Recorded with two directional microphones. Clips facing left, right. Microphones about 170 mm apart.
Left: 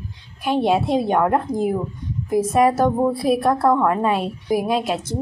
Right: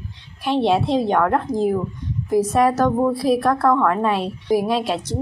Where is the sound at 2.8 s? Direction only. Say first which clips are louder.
Even; 20° left (ahead or behind).